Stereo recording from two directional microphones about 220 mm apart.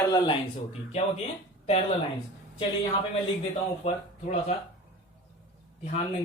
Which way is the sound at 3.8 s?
30° left (ahead or behind).